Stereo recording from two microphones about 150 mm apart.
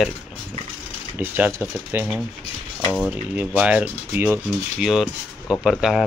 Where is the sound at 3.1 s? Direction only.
10° right (ahead or behind).